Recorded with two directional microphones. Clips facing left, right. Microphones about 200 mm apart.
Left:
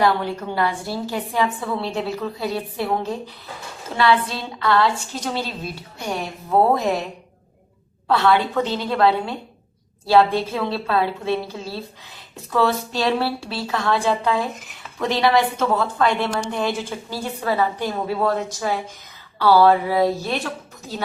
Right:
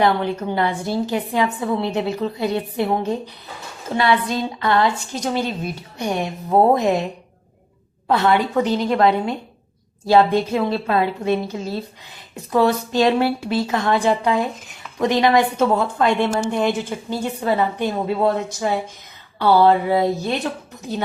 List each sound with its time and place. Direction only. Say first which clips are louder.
0.0 s a woman's voice: right 2 dB; 20° right (ahead or behind)
3.9 s a woman's voice: right 1 dB; 20° right (ahead or behind)
8.0 s a woman's voice: right 1 dB; 20° right (ahead or behind)
10.5 s a woman's voice: right 3 dB; 15° right (ahead or behind)